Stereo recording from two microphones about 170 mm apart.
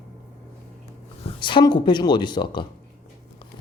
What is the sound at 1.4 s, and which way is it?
A woman's voice, 30° left (ahead or behind).